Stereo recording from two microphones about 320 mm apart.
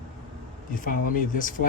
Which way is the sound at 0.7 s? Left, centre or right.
Left.